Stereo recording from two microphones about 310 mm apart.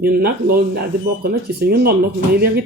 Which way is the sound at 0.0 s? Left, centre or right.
Right.